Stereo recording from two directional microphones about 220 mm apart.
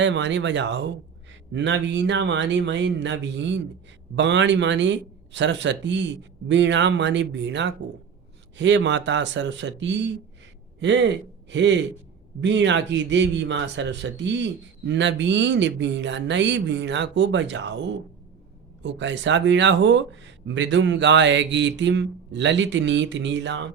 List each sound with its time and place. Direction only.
0.0 s a man's voice: 55° right (ahead or behind)
18.8 s a man's voice: 55° right (ahead or behind)